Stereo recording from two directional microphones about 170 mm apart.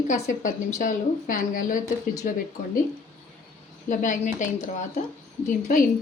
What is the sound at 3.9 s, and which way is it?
A woman's voice, 50° left (ahead or behind).